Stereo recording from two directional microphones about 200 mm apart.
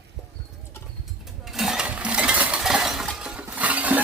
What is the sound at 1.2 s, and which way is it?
Coin, centre (ahead or behind).